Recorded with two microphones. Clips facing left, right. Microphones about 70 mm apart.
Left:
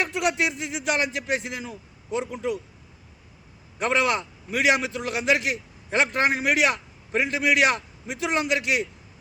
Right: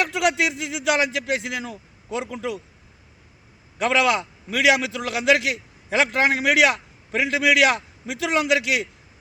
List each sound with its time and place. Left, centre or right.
0.0 s a man's voice: right
3.8 s a man's voice: right